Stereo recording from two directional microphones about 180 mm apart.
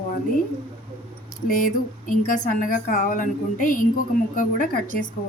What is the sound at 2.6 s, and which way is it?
Speech, 50° left (ahead or behind).